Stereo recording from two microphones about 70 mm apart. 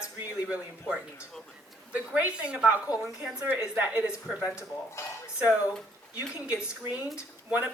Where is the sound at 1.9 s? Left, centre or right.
Right.